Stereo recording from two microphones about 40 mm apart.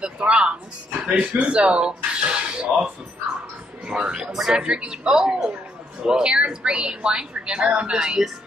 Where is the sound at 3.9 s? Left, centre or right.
Right.